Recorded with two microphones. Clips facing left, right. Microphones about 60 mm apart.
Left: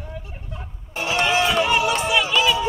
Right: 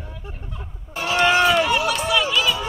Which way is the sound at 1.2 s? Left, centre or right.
Right.